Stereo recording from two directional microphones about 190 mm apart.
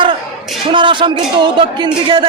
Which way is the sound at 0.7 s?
25° right (ahead or behind).